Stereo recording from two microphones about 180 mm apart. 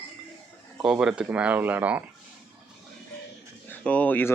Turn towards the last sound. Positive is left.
turn(degrees=10)  # may be behind; listen again after turning